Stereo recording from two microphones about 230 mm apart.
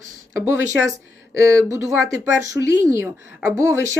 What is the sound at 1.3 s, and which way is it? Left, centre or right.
Speech, centre.